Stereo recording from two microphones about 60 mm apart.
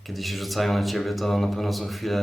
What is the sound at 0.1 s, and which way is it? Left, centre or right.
Speech, centre.